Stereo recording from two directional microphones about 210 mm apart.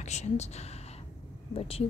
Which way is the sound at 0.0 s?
30° left (ahead or behind).